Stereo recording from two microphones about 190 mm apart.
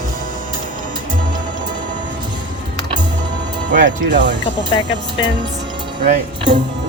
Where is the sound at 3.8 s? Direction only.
70° right (ahead or behind).